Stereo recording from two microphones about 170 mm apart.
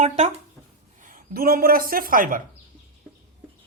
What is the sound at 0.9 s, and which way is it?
Speech, 50° right (ahead or behind).